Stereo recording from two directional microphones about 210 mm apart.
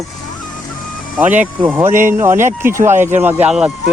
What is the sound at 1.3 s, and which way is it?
Speech, 10° right (ahead or behind).